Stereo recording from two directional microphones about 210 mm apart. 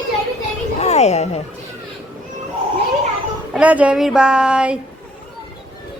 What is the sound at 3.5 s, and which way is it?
Speech, 5° right (ahead or behind).